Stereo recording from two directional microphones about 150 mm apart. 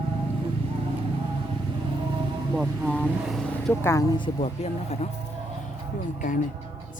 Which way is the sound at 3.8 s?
20° left (ahead or behind).